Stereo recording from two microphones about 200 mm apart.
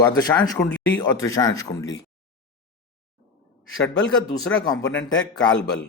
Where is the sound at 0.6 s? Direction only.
5° left (ahead or behind).